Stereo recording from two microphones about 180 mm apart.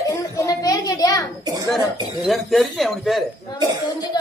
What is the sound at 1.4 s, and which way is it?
Speech, 20° right (ahead or behind).